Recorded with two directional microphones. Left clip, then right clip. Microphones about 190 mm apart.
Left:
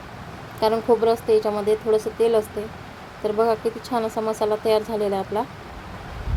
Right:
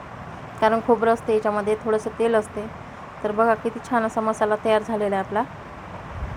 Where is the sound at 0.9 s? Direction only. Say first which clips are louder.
Left 1 dB; 5° left (ahead or behind).